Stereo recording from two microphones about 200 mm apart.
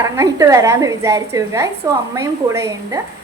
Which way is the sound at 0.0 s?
15° right (ahead or behind).